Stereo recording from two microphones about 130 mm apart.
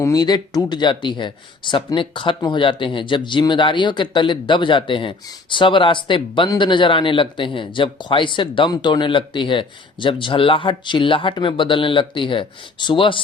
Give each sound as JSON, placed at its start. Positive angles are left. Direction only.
{"t": 0.0, "sound": "speech", "side_deg": 30}